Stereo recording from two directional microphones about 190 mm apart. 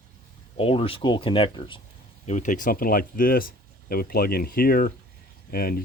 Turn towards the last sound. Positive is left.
turn(degrees=50)  # may be behind; listen again after turning